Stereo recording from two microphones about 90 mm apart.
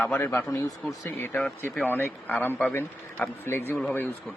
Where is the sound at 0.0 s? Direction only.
20° left (ahead or behind).